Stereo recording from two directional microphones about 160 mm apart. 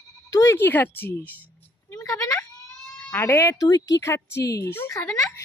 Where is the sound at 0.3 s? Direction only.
20° left (ahead or behind).